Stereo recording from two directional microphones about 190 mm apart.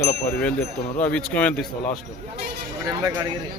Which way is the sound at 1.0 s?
5° left (ahead or behind).